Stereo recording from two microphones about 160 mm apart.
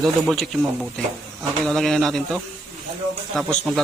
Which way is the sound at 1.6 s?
Centre (ahead or behind).